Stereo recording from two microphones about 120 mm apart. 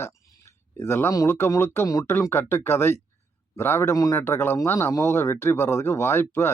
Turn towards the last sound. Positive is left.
turn(degrees=20)  # may be behind; listen again after turning